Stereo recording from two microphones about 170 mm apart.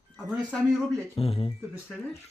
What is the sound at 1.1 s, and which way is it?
Speech, 35° left (ahead or behind).